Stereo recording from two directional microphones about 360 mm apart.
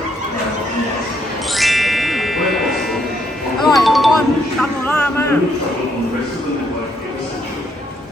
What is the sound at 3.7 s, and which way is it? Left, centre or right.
Speech, centre.